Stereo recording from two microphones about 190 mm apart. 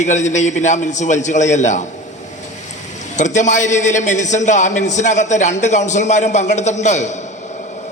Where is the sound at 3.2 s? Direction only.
40° left (ahead or behind).